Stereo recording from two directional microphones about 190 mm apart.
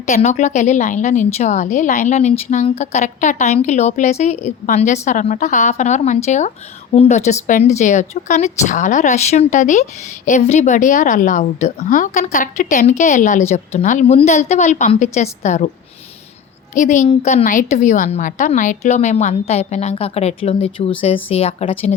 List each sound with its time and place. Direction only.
0.0 s speech: 40° left (ahead or behind)
16.7 s speech: 40° left (ahead or behind)